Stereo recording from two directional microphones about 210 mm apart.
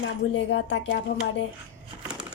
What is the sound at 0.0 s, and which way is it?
Speech, 60° left (ahead or behind).